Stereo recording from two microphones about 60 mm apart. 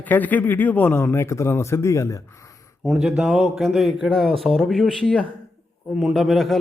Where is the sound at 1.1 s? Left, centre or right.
Left.